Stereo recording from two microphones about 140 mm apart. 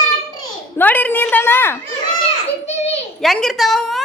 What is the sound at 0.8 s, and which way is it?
A woman's voice, 10° left (ahead or behind).